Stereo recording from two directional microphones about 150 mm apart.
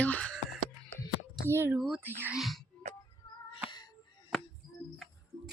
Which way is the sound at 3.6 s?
30° left (ahead or behind).